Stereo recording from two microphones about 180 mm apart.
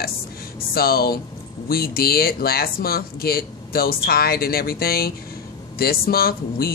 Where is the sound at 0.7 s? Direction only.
55° left (ahead or behind).